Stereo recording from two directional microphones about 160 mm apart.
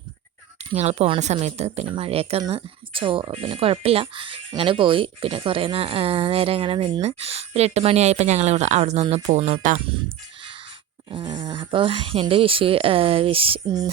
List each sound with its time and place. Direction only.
0.6 s speech: 40° right (ahead or behind)
11.1 s speech: 30° right (ahead or behind)